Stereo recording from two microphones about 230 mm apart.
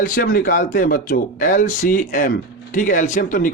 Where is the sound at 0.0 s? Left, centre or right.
Left.